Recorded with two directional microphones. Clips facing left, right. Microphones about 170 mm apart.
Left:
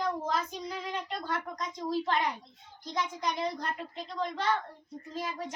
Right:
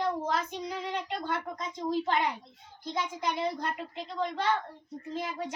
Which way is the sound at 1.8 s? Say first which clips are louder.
Right 1 dB; 20° right (ahead or behind).